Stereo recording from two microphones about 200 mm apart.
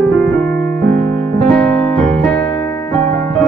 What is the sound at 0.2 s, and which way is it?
Music, 5° left (ahead or behind).